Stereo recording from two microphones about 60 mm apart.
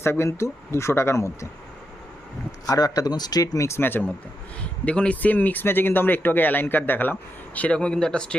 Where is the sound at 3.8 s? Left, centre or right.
Left.